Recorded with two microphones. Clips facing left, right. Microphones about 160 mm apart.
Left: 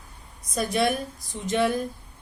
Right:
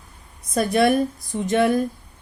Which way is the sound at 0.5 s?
60° right (ahead or behind).